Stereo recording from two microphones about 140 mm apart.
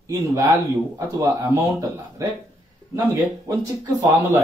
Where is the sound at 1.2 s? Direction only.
25° right (ahead or behind).